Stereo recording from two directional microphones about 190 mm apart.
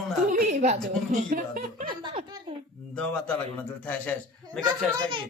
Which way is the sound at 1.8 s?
25° right (ahead or behind).